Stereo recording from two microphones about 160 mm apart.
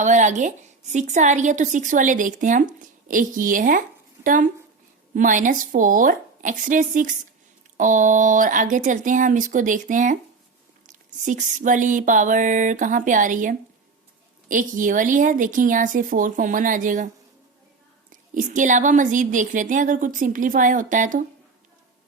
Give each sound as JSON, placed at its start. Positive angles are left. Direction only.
{"t": 0.0, "sound": "a woman's voice", "side_deg": -50}
{"t": 18.1, "sound": "a woman's voice", "side_deg": -50}